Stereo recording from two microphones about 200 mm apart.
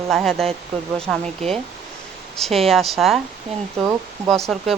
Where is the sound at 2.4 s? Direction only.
Centre (ahead or behind).